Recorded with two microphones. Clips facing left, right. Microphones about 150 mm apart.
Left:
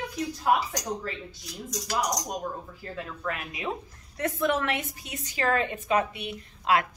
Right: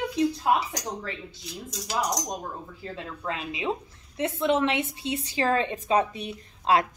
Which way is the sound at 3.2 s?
20° right (ahead or behind).